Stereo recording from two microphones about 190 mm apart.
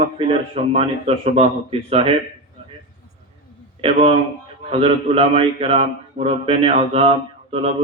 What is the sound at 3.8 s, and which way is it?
A man's voice, 30° right (ahead or behind).